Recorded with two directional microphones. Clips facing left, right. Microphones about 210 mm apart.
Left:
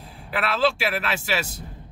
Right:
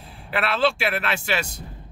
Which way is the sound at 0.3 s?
Centre (ahead or behind).